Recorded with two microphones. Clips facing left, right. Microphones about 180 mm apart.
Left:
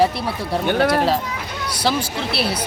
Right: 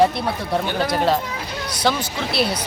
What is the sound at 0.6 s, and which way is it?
Speech, 60° left (ahead or behind).